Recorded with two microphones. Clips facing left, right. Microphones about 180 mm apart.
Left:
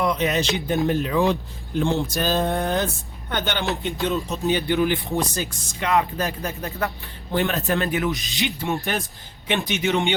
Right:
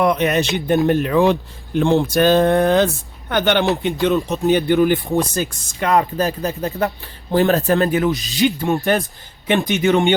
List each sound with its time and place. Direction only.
0.0 s speech: 60° right (ahead or behind)
4.7 s speech: 45° right (ahead or behind)
5.1 s speech: 55° right (ahead or behind)
5.9 s speech: 40° right (ahead or behind)
8.1 s speech: centre (ahead or behind)
8.6 s speech: 60° right (ahead or behind)